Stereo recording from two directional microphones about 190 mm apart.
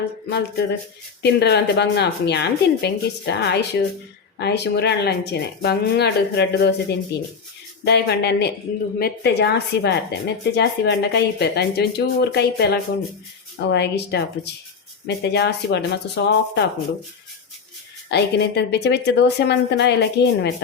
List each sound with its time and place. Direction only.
0.3 s speech: 60° left (ahead or behind)
18.1 s speech: 60° left (ahead or behind)